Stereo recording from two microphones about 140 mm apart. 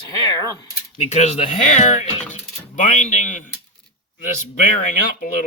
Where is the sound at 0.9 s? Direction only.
50° left (ahead or behind).